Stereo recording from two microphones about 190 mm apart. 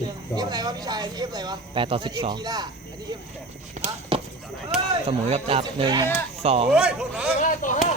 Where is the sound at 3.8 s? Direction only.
30° right (ahead or behind).